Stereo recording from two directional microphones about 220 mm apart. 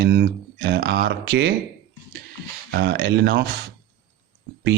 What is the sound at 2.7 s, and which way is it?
Speech, 50° right (ahead or behind).